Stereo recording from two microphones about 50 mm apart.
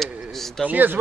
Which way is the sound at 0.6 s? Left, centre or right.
Right.